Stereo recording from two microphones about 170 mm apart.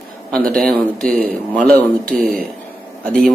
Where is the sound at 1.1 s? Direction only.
55° right (ahead or behind).